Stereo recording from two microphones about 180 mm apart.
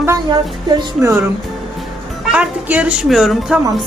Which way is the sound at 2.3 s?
5° right (ahead or behind).